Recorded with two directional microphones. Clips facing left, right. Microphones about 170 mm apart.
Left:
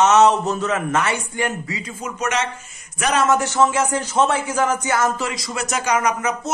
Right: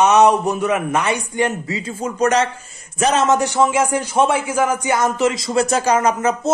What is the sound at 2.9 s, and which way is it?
A man's voice, 25° right (ahead or behind).